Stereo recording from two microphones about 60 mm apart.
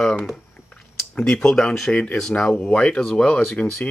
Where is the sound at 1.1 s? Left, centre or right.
Centre.